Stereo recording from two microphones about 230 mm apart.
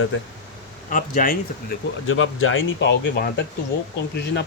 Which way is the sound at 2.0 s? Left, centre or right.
Left.